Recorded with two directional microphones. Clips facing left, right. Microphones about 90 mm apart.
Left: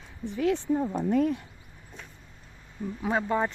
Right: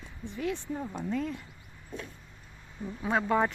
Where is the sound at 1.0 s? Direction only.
65° left (ahead or behind).